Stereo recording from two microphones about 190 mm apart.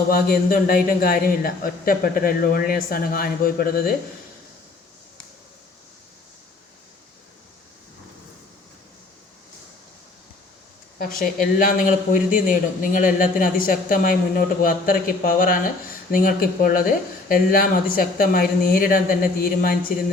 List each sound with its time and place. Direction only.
0.1 s a man's voice: 50° left (ahead or behind)
11.5 s a man's voice: 45° left (ahead or behind)